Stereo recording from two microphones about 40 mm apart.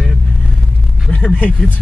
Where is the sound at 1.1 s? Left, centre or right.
Left.